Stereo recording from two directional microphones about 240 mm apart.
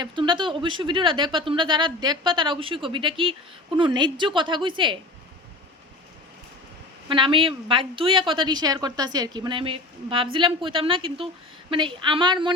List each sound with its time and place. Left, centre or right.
0.0 s speech: centre
7.1 s speech: right